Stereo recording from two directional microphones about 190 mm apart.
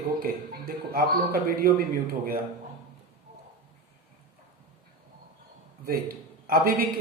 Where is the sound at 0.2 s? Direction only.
50° right (ahead or behind).